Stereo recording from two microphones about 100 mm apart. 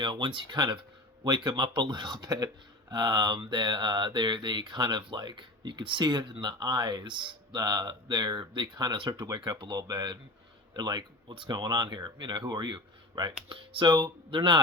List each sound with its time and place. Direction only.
0.0 s speech: 55° right (ahead or behind)
0.4 s speech: 45° right (ahead or behind)